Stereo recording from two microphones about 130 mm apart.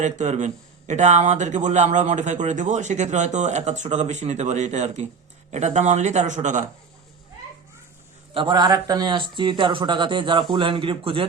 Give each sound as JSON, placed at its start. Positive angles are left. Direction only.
{"t": 0.0, "sound": "speech", "side_deg": -65}
{"t": 8.3, "sound": "speech", "side_deg": -40}